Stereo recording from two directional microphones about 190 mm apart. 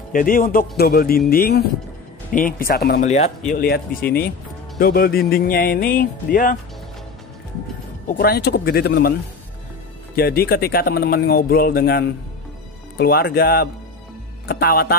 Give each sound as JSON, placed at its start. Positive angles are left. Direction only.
{"t": 0.1, "sound": "speech", "side_deg": 45}
{"t": 3.0, "sound": "speech", "side_deg": 35}
{"t": 3.5, "sound": "speech", "side_deg": 50}
{"t": 8.1, "sound": "speech", "side_deg": 55}
{"t": 10.1, "sound": "speech", "side_deg": 55}